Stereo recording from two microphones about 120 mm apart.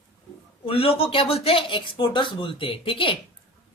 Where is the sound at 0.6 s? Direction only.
50° left (ahead or behind).